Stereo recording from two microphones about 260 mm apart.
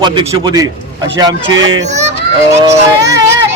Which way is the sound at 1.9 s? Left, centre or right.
Right.